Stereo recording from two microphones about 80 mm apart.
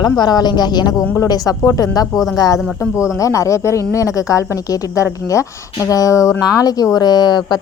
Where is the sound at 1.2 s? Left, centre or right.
Left.